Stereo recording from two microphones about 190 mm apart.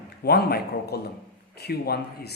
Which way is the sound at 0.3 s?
55° left (ahead or behind).